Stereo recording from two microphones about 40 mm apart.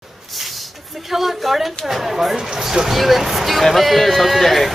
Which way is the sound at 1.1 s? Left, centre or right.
Centre.